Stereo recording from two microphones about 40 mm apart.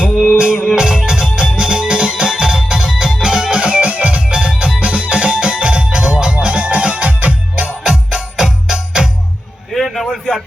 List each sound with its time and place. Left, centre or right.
0.3 s music: right
7.9 s music: centre
9.7 s a sound: centre